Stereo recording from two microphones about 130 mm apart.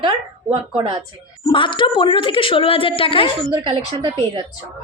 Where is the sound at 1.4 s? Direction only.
40° left (ahead or behind).